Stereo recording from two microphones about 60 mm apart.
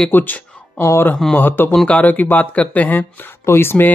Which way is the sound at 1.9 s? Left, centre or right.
Left.